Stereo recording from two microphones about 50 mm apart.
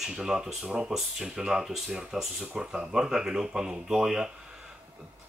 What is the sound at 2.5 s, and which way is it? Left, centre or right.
Speech, centre.